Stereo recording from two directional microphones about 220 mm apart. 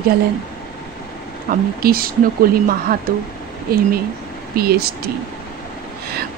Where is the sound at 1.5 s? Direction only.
40° right (ahead or behind).